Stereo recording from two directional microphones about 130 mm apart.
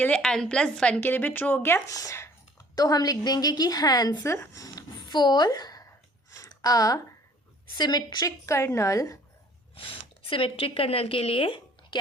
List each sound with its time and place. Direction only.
0.0 s a woman's voice: 5° left (ahead or behind); by 5.8 s 30° left (ahead or behind)
6.4 s a sound: 25° left (ahead or behind)
7.8 s a woman's voice: 35° left (ahead or behind)
9.7 s speech: 45° left (ahead or behind)